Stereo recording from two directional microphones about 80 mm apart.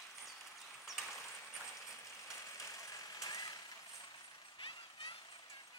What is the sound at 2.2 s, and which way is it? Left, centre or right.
Vehicle, left.